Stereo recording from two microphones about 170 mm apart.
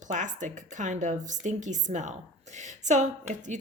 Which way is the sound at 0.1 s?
45° right (ahead or behind).